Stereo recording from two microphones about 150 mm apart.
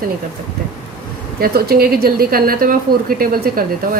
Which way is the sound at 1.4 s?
90° right.